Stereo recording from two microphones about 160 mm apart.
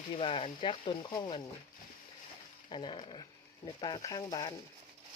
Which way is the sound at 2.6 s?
30° left (ahead or behind).